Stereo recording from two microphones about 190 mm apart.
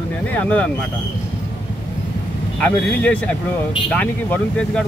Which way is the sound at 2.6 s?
5° left (ahead or behind).